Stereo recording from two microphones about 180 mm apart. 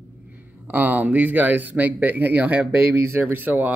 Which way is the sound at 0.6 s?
10° right (ahead or behind).